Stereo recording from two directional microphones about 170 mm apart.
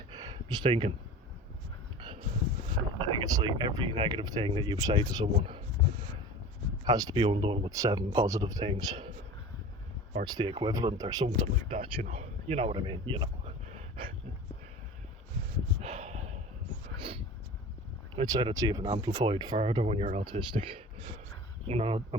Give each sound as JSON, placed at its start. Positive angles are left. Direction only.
{"t": 0.1, "sound": "a sound", "side_deg": -25}
{"t": 0.7, "sound": "speech", "side_deg": -35}
{"t": 3.1, "sound": "speech", "side_deg": -25}
{"t": 6.8, "sound": "speech", "side_deg": -25}
{"t": 10.2, "sound": "speech", "side_deg": -25}
{"t": 15.8, "sound": "snort", "side_deg": -40}
{"t": 17.0, "sound": "dog", "side_deg": -35}
{"t": 18.1, "sound": "speech", "side_deg": -25}